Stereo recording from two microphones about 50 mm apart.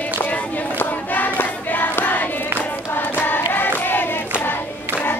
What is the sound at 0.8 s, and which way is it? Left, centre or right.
Choir, left.